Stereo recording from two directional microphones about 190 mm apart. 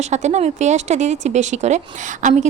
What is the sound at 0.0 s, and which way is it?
Speech, 35° right (ahead or behind).